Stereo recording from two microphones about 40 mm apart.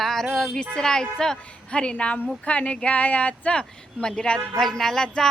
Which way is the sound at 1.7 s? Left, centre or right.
Left.